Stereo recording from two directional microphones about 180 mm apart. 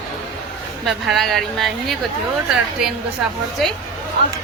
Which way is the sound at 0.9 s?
Centre (ahead or behind).